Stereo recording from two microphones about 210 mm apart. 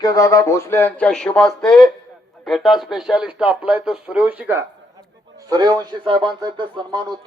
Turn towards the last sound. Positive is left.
turn(degrees=-20)  # may be behind; listen again after turning